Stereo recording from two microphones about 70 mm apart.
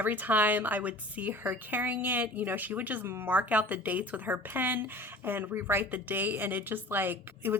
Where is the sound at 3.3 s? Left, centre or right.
Right.